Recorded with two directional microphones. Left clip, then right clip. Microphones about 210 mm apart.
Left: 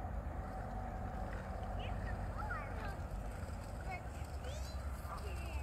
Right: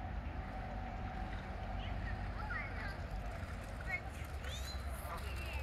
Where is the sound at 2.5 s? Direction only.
35° left (ahead or behind).